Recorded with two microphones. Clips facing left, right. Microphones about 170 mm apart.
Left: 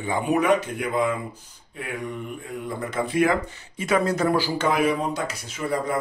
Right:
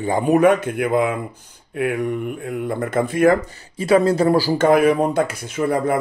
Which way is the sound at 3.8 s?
30° right (ahead or behind).